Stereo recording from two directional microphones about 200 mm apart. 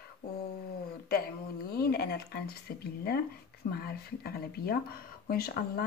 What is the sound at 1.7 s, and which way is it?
Speech, 50° left (ahead or behind).